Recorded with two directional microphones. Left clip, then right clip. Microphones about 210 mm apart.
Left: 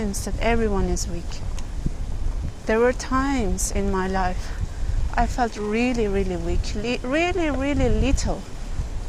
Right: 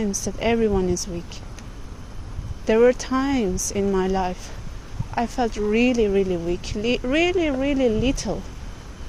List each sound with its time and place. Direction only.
0.2 s speech: 40° right (ahead or behind)
2.6 s speech: 40° right (ahead or behind)